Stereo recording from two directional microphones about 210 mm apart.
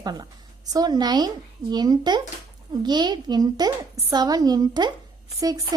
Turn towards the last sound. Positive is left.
turn(degrees=-15)  # may be behind; listen again after turning